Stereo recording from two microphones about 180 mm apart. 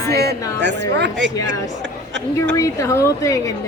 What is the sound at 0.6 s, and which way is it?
Speech, 75° right (ahead or behind).